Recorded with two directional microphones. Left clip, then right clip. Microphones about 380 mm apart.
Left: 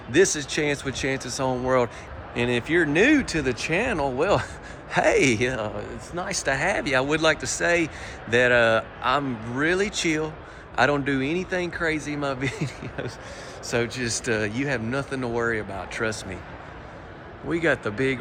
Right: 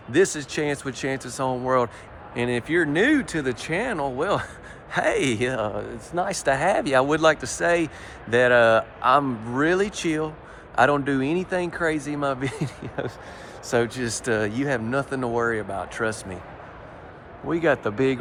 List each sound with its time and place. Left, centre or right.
0.1 s speech: centre
17.5 s speech: centre